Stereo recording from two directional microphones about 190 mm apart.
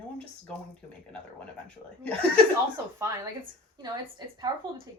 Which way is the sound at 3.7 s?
20° right (ahead or behind).